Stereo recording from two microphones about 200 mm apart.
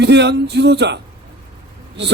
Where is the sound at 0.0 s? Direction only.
60° right (ahead or behind).